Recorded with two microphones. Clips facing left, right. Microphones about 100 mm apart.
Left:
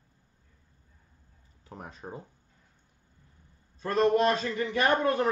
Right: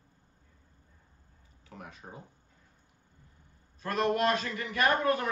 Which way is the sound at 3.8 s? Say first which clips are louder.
Left 4 dB; 30° left (ahead or behind).